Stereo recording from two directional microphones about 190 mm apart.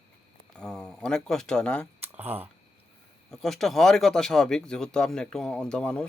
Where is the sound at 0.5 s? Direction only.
5° left (ahead or behind).